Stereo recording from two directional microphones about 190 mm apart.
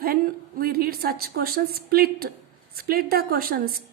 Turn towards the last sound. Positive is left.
turn(degrees=-50)  # may be behind; listen again after turning